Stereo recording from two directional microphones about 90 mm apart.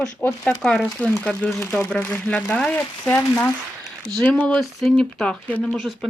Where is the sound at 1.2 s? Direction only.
15° left (ahead or behind).